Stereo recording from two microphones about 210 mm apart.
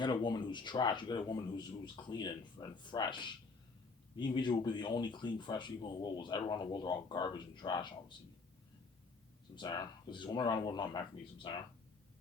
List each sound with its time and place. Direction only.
0.0 s speech: 20° left (ahead or behind)
9.6 s speech: 20° left (ahead or behind)